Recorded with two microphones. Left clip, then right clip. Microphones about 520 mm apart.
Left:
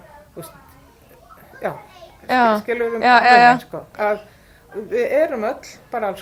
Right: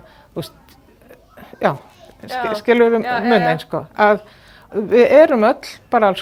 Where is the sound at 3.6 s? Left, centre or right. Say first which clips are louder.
Right 7 dB; right.